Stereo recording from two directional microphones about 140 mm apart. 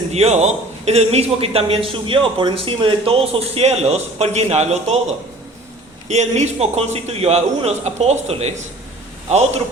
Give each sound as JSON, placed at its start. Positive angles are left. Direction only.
{"t": 0.1, "sound": "a man's voice", "side_deg": -50}
{"t": 6.1, "sound": "a man's voice", "side_deg": -55}